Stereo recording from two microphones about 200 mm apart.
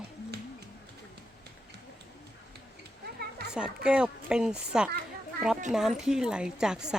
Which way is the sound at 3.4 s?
50° right (ahead or behind).